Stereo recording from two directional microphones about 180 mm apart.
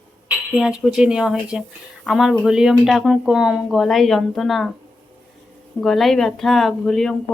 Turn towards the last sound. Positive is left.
turn(degrees=0)  # may be behind; listen again after turning